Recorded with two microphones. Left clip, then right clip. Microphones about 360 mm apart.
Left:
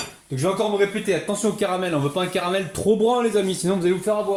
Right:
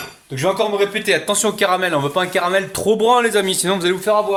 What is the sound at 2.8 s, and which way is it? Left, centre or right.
Speech, right.